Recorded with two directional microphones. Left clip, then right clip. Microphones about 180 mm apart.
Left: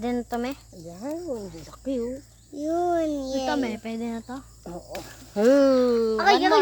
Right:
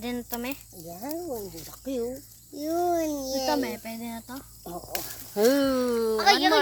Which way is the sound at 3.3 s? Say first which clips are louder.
Right 2 dB; 55° left (ahead or behind).